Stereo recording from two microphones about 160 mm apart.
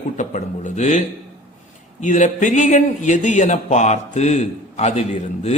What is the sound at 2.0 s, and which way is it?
A man's voice, 50° left (ahead or behind).